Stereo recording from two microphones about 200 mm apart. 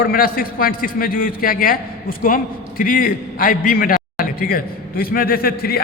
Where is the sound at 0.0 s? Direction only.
45° left (ahead or behind).